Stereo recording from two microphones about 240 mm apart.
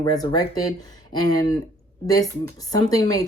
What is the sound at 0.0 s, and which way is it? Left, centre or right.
Speech, centre.